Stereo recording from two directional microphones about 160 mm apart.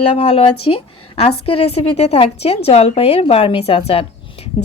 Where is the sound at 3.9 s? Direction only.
35° left (ahead or behind).